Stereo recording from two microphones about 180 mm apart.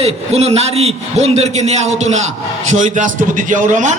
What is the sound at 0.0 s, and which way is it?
A man's voice, 35° right (ahead or behind).